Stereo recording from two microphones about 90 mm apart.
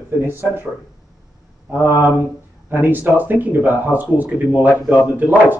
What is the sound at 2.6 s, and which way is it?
Speech, 20° right (ahead or behind).